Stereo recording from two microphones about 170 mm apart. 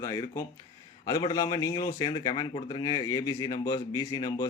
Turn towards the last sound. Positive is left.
turn(degrees=25)  # may be behind; listen again after turning